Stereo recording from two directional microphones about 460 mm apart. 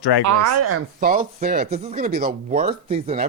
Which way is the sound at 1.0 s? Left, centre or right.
Centre.